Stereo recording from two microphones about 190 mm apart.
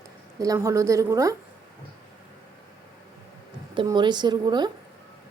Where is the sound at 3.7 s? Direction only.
25° right (ahead or behind).